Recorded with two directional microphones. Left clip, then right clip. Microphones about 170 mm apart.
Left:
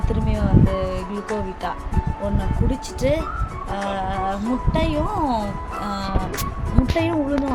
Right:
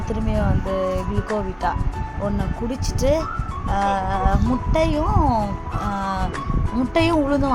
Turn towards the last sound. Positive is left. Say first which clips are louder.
# right 3 dB
turn(degrees=-20)  # may be behind; listen again after turning